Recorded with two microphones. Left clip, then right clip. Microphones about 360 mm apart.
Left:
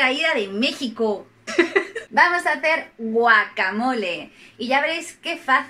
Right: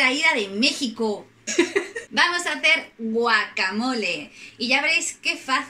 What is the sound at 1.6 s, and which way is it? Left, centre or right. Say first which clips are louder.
Laughter: left 3 dB; left.